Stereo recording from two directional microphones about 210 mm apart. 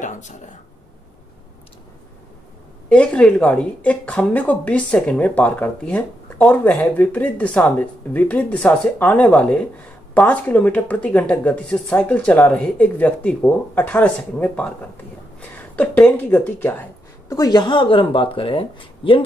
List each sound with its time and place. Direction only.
0.0 s speech: 35° left (ahead or behind)
2.9 s speech: 5° left (ahead or behind); by 19.2 s 25° left (ahead or behind)